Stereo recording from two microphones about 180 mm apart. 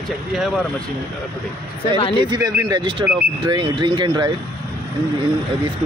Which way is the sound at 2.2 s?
20° right (ahead or behind).